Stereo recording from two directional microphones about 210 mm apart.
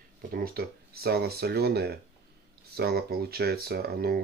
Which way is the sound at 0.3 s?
45° right (ahead or behind).